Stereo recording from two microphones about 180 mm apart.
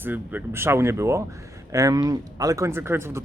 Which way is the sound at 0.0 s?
10° right (ahead or behind).